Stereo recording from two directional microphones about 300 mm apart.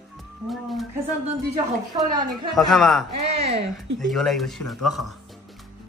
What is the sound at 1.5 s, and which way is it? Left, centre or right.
Speech, centre.